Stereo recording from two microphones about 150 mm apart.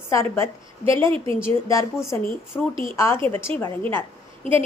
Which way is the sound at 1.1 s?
40° right (ahead or behind).